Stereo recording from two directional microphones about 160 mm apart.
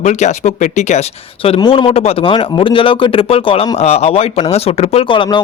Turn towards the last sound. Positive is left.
turn(degrees=30)  # may be behind; listen again after turning